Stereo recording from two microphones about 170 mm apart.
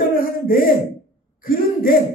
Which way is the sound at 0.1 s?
60° left (ahead or behind).